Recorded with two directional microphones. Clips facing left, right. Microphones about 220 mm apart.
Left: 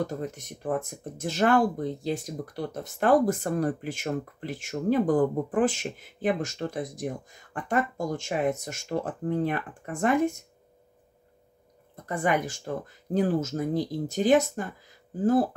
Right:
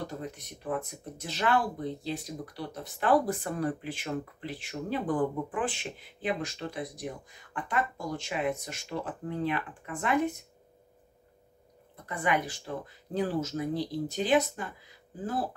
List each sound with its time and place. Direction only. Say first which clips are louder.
0.0 s speech: left 6 dB; 45° left (ahead or behind)
12.1 s speech: left 4 dB; 45° left (ahead or behind)